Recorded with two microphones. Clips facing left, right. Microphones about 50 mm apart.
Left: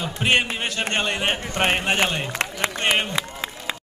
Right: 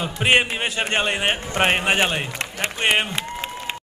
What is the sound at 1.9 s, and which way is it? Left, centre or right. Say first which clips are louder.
A man's voice: right 1 dB; centre.